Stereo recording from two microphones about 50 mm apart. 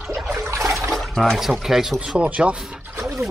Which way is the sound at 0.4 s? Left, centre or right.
Right.